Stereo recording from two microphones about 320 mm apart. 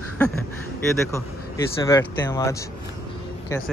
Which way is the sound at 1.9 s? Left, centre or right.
Centre.